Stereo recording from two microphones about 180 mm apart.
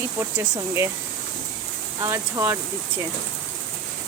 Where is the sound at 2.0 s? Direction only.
15° right (ahead or behind).